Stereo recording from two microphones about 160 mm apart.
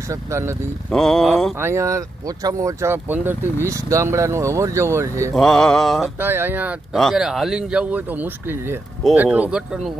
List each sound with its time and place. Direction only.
0.1 s speech: 15° right (ahead or behind)
0.8 s speech: 5° left (ahead or behind)
1.6 s speech: 15° right (ahead or behind)
5.3 s speech: 5° left (ahead or behind)
6.1 s speech: 15° right (ahead or behind)